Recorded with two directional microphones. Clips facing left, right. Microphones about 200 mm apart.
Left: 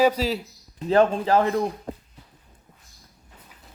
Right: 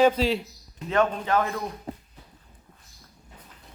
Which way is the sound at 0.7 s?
35° left (ahead or behind).